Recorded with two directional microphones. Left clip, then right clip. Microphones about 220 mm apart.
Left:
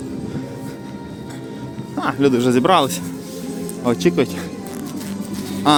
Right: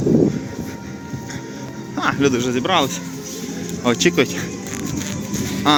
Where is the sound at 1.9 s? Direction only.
15° left (ahead or behind); by 2.9 s 30° left (ahead or behind).